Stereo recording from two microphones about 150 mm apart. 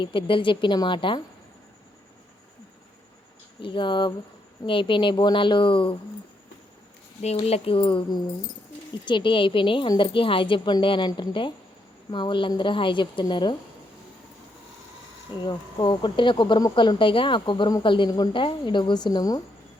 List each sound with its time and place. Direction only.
0.0 s speech: 35° left (ahead or behind)
3.6 s speech: 35° left (ahead or behind)
7.2 s speech: 45° left (ahead or behind)
15.4 s speech: 30° left (ahead or behind)